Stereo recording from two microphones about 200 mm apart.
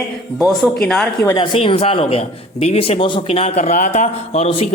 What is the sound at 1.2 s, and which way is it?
A man's voice, 20° left (ahead or behind).